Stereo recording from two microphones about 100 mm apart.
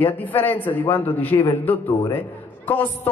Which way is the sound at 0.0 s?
20° left (ahead or behind).